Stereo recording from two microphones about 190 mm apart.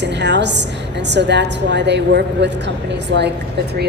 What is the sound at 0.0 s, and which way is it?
A woman's voice, 65° right (ahead or behind).